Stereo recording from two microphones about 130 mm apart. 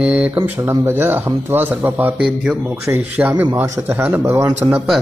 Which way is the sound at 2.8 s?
20° right (ahead or behind).